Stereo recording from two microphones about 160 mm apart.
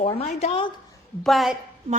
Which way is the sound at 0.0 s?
40° left (ahead or behind).